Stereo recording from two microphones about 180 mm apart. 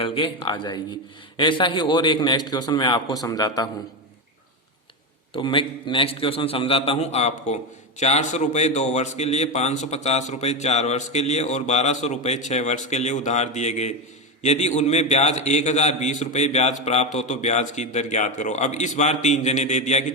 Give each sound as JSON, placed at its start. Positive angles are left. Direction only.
{"t": 0.0, "sound": "a man's voice", "side_deg": 30}
{"t": 5.3, "sound": "a man's voice", "side_deg": 30}